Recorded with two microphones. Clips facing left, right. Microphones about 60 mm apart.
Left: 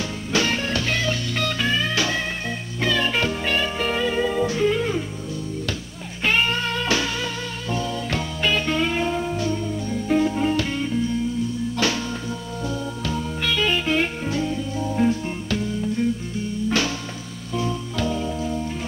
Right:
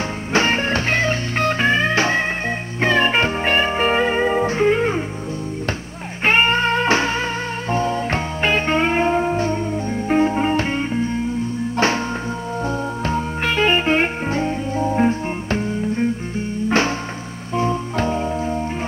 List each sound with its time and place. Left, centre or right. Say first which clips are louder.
0.3 s music: right 5 dB; right
6.2 s music: right 5 dB; right